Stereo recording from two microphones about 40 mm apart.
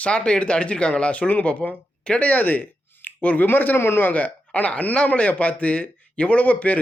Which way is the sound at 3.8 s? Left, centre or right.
Left.